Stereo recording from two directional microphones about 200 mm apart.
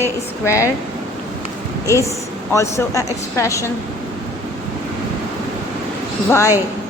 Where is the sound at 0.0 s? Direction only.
15° left (ahead or behind).